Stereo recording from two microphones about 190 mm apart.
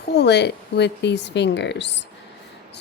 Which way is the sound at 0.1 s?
60° left (ahead or behind).